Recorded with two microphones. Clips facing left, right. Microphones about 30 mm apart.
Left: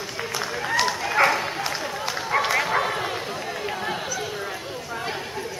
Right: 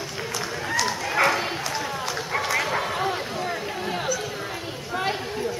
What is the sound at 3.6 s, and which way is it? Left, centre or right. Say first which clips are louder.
Chatter: left 2 dB; centre.